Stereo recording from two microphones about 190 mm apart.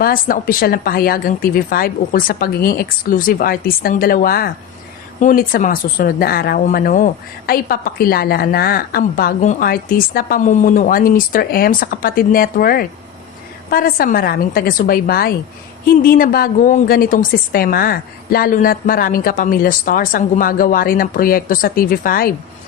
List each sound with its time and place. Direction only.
0.0 s speech: 50° left (ahead or behind)